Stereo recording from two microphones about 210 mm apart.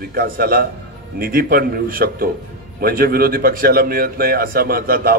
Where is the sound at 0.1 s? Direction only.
45° right (ahead or behind).